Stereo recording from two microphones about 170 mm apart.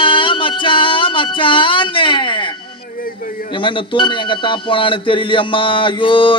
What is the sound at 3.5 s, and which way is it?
Speech, 30° left (ahead or behind).